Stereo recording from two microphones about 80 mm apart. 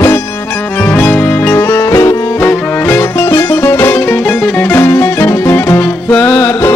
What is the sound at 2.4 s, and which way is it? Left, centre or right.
Music, left.